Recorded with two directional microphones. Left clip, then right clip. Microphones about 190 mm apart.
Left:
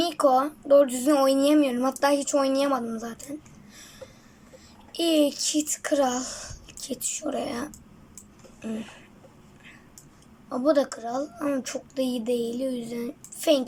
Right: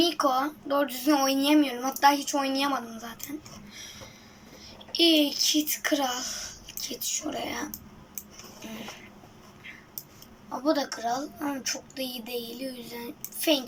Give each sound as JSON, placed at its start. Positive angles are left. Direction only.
{"t": 0.0, "sound": "speech", "side_deg": 40}
{"t": 4.9, "sound": "speech", "side_deg": 40}
{"t": 10.6, "sound": "speech", "side_deg": 40}